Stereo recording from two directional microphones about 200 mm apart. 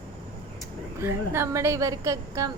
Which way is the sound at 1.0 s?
15° right (ahead or behind).